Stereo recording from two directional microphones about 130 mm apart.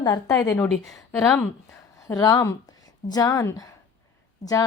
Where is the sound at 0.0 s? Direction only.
30° left (ahead or behind).